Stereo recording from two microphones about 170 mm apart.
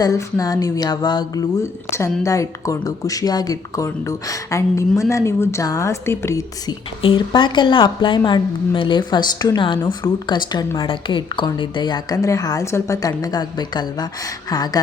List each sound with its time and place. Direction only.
0.0 s a woman's voice: 20° left (ahead or behind)
7.0 s a woman's voice: 30° left (ahead or behind)